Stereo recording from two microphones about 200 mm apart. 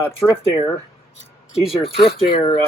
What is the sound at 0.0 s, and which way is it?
Speech, 15° left (ahead or behind).